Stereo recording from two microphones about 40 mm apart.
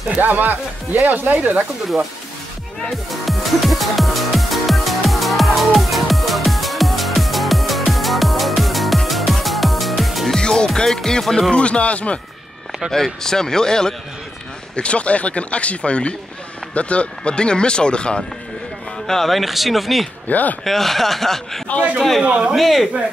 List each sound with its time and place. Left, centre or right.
0.2 s speech: right
3.1 s music: centre
10.3 s music: centre
11.1 s speech: centre
11.5 s speech: left
12.9 s speech: centre
14.8 s speech: left
19.0 s speech: centre
20.2 s speech: left
20.6 s speech: centre